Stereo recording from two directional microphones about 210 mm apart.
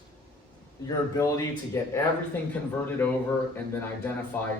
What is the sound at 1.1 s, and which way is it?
A man's voice, 15° left (ahead or behind).